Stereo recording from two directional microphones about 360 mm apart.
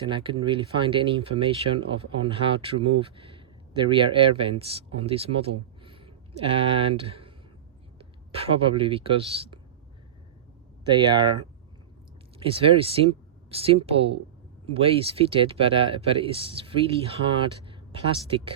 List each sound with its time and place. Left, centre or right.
0.1 s speech: centre
10.9 s speech: centre
12.4 s speech: centre